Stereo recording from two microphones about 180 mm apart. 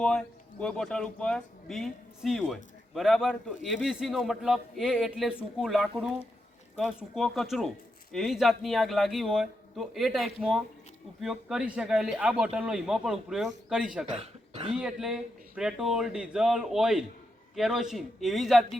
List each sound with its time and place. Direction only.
0.0 s a man's voice: 5° left (ahead or behind)
14.2 s speech: 30° right (ahead or behind)
14.8 s a man's voice: 5° right (ahead or behind)